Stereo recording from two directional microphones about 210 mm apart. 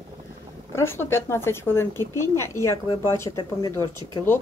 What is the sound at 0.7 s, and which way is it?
Speech, 10° left (ahead or behind).